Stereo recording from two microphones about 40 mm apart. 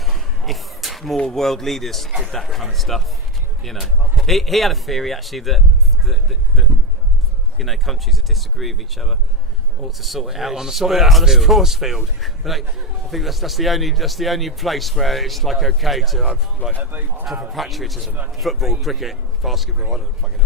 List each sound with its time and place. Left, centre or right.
0.0 s a sound: centre
1.1 s speech: centre
7.6 s a man's voice: centre
16.9 s speech: right
17.5 s speech: centre